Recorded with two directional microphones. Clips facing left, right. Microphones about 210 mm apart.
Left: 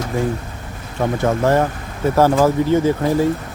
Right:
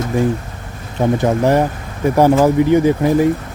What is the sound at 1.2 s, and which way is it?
Speech, 15° right (ahead or behind).